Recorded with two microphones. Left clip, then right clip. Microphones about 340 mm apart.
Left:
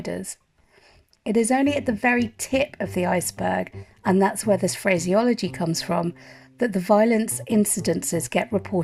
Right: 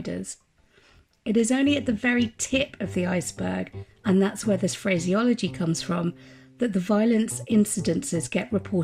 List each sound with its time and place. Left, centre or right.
0.0 s speech: centre